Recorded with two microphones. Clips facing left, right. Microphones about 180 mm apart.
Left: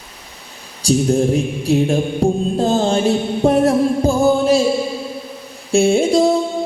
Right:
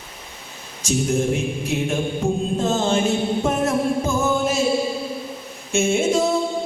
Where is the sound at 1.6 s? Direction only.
35° left (ahead or behind).